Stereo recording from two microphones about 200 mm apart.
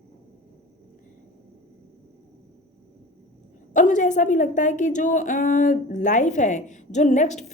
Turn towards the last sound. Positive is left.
turn(degrees=35)  # may be behind; listen again after turning